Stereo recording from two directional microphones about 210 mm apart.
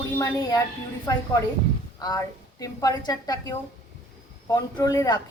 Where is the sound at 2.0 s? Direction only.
15° left (ahead or behind).